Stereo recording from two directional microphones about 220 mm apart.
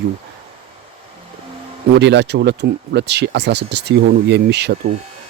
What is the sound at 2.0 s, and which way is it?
Speech, 50° right (ahead or behind).